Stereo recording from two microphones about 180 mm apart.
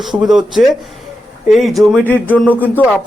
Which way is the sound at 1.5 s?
Centre (ahead or behind).